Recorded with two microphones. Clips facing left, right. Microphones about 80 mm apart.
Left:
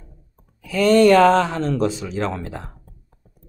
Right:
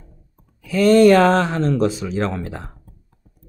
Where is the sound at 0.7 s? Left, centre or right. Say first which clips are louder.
Right 2 dB; right.